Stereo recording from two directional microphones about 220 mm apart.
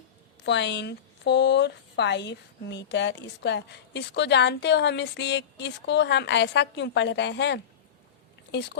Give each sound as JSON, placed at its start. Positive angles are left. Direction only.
{"t": 0.4, "sound": "speech", "side_deg": 50}